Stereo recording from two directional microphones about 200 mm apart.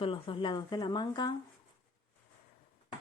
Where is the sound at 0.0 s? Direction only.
25° left (ahead or behind).